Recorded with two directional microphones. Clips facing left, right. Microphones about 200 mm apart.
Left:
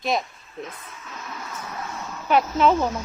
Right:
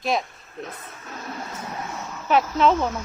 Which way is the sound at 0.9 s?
40° right (ahead or behind).